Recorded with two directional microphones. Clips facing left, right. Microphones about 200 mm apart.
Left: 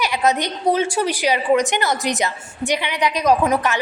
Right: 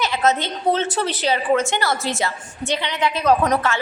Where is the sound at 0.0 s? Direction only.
15° left (ahead or behind).